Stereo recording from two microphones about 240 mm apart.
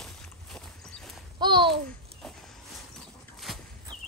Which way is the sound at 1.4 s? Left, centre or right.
Centre.